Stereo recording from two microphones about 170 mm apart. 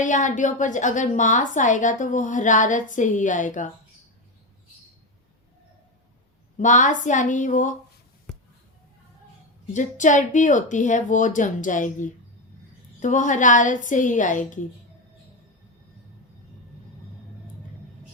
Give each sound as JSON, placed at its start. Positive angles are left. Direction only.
{"t": 0.0, "sound": "a woman's voice", "side_deg": 45}
{"t": 6.6, "sound": "a woman's voice", "side_deg": 45}
{"t": 9.7, "sound": "a woman's voice", "side_deg": 45}